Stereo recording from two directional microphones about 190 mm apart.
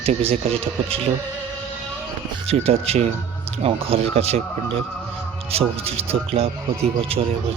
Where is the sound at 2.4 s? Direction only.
30° right (ahead or behind).